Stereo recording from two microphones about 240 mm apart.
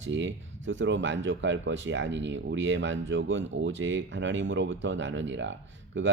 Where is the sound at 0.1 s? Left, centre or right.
Right.